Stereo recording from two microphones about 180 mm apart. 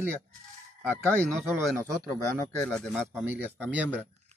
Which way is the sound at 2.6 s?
5° left (ahead or behind).